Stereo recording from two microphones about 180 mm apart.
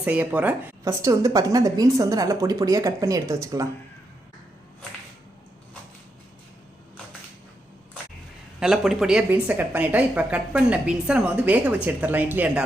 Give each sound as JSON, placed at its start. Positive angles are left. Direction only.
{"t": 0.0, "sound": "speech", "side_deg": -10}
{"t": 8.6, "sound": "speech", "side_deg": 0}